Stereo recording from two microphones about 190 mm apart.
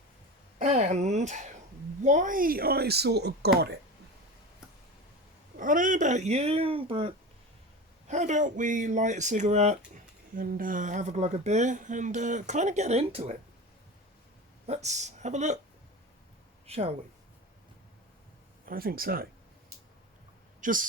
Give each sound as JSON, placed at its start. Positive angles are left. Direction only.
{"t": 0.6, "sound": "speech", "side_deg": -40}
{"t": 5.5, "sound": "speech", "side_deg": -45}
{"t": 14.7, "sound": "speech", "side_deg": -35}
{"t": 16.6, "sound": "speech", "side_deg": -35}
{"t": 18.7, "sound": "speech", "side_deg": -50}
{"t": 20.6, "sound": "speech", "side_deg": -45}